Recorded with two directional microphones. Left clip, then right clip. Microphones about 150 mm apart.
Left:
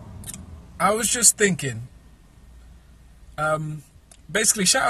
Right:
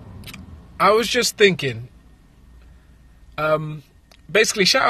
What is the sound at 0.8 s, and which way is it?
Speech, 15° right (ahead or behind).